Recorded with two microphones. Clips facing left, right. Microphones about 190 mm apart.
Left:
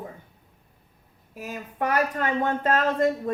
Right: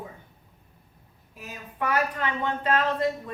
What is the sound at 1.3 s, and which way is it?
A woman's voice, 45° left (ahead or behind).